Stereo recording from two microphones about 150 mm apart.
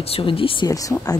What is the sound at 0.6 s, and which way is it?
Speech, 25° left (ahead or behind).